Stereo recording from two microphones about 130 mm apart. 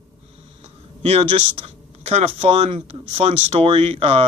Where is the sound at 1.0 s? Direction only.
45° right (ahead or behind).